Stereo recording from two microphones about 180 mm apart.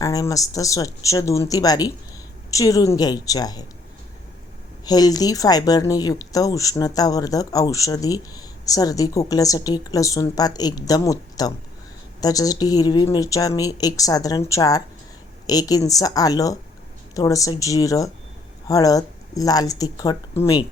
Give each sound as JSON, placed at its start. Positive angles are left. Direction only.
{"t": 0.0, "sound": "speech", "side_deg": 20}
{"t": 4.9, "sound": "speech", "side_deg": 20}